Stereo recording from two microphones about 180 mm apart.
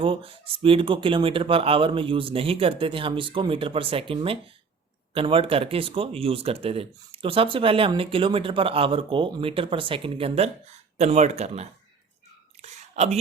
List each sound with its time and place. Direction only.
0.0 s speech: 30° right (ahead or behind)
12.6 s whispering: 40° right (ahead or behind)